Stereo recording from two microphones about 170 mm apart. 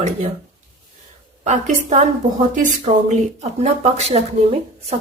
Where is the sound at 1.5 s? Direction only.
45° right (ahead or behind).